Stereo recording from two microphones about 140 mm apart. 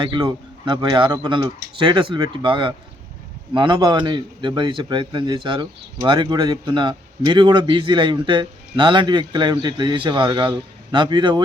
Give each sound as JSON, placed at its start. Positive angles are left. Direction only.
{"t": 0.0, "sound": "speech", "side_deg": -30}